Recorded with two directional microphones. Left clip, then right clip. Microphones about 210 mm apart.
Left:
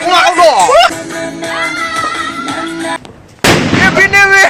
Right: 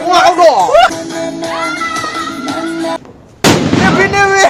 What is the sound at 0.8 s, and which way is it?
Music, 40° right (ahead or behind).